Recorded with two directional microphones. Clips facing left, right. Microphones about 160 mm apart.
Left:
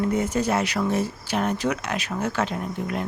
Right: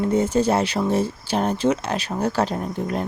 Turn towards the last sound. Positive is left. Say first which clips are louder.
# right 3 dB
turn(degrees=-35)  # may be behind; listen again after turning